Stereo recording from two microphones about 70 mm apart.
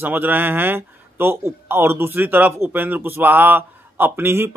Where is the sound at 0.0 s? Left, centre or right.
Right.